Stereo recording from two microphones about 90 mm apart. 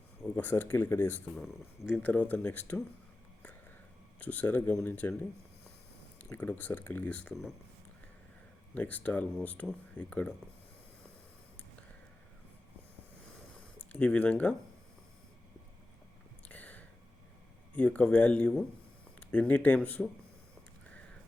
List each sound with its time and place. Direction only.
0.3 s speech: 25° left (ahead or behind)
1.4 s speech: 5° right (ahead or behind)
2.0 s speech: 15° left (ahead or behind)
4.2 s speech: 20° left (ahead or behind)
6.3 s speech: 20° left (ahead or behind)
8.7 s speech: 20° left (ahead or behind)
13.9 s speech: 15° left (ahead or behind)
16.5 s a sound: 15° left (ahead or behind)
17.7 s speech: 15° left (ahead or behind)